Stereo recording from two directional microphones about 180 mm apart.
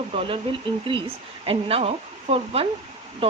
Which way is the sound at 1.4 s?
30° right (ahead or behind).